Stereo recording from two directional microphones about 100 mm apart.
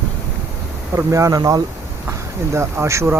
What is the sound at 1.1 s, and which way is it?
Speech, 30° right (ahead or behind).